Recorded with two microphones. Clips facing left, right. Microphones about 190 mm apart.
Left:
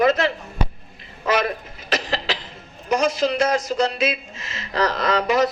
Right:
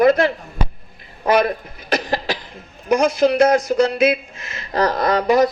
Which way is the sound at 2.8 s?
60° right (ahead or behind).